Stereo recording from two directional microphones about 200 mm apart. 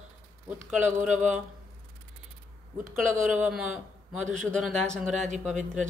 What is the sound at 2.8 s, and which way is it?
Speech, 40° right (ahead or behind).